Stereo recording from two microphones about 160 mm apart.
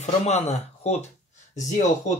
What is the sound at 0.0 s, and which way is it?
Speech, 45° left (ahead or behind).